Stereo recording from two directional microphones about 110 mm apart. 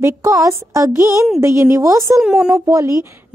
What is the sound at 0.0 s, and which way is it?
A woman's voice, 30° right (ahead or behind).